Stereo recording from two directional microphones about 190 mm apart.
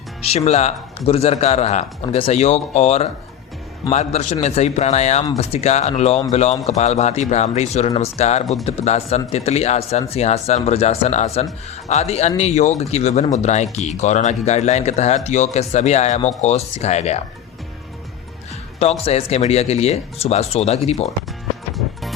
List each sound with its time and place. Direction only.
0.2 s speech: 35° left (ahead or behind)
18.8 s speech: 35° left (ahead or behind)